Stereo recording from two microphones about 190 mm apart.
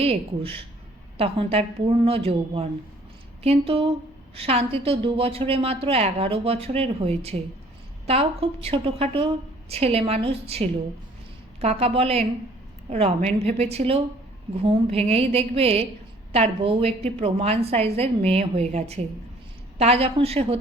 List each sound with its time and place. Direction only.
0.0 s a woman's voice: 30° right (ahead or behind)